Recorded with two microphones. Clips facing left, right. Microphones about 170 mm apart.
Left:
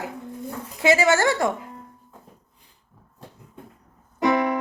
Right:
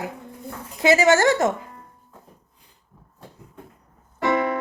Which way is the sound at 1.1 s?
40° right (ahead or behind).